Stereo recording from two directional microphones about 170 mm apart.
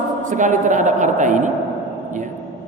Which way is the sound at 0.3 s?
45° right (ahead or behind).